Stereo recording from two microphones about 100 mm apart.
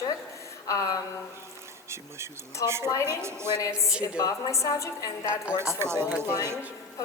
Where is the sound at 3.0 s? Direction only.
25° right (ahead or behind).